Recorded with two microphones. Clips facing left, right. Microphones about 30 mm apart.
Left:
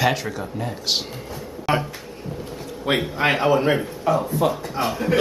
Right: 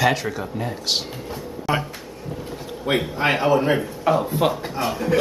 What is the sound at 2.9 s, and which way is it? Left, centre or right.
Speech, left.